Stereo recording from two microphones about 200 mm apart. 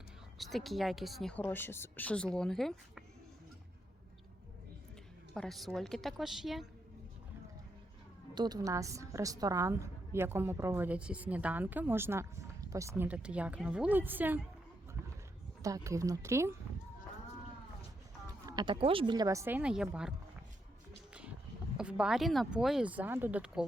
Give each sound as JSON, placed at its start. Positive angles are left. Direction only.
{"t": 0.3, "sound": "speech", "side_deg": 0}
{"t": 5.3, "sound": "speech", "side_deg": 0}
{"t": 8.4, "sound": "a woman's voice", "side_deg": -20}
{"t": 15.6, "sound": "a woman's voice", "side_deg": -15}
{"t": 18.4, "sound": "a woman's voice", "side_deg": -20}
{"t": 21.1, "sound": "a sound", "side_deg": -5}
{"t": 21.8, "sound": "speech", "side_deg": -5}